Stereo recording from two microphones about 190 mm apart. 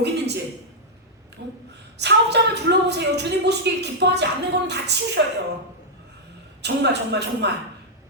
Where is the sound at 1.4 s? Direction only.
65° right (ahead or behind).